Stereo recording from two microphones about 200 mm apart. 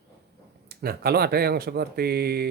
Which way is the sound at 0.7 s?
50° right (ahead or behind).